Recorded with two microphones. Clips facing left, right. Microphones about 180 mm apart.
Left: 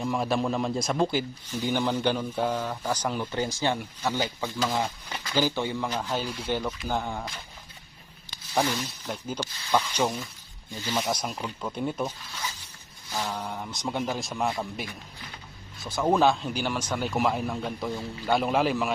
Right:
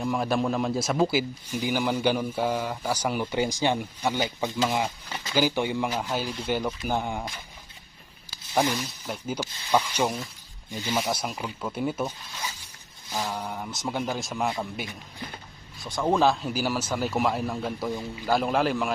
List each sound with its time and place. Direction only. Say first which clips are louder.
0.0 s speech: right 1 dB; centre (ahead or behind); by 10.9 s 15° right (ahead or behind)
10.9 s speech: right 1 dB; centre (ahead or behind)